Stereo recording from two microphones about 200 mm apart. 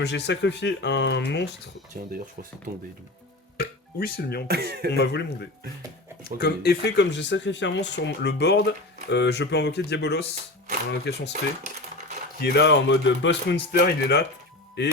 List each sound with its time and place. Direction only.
0.0 s speech: 60° left (ahead or behind)
2.7 s speech: 45° right (ahead or behind)
3.6 s speech: 50° left (ahead or behind)
4.4 s speech: 55° right (ahead or behind)
4.9 s speech: 55° left (ahead or behind)
12.4 s speech: 60° left (ahead or behind)